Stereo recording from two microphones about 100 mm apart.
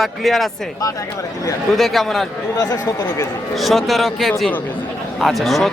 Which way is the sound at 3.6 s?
Centre (ahead or behind).